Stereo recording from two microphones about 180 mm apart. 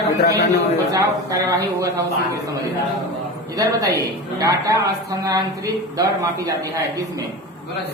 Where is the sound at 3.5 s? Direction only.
20° right (ahead or behind).